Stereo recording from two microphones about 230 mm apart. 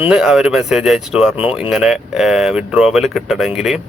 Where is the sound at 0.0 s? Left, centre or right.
Centre.